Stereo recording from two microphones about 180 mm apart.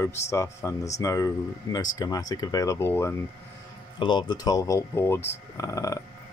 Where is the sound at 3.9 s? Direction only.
25° left (ahead or behind).